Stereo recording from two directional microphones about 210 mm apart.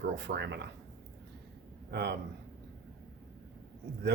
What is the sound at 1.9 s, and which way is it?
Speech, 55° right (ahead or behind).